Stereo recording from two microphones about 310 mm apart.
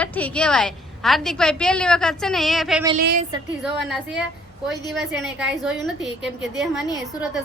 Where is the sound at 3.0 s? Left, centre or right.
Right.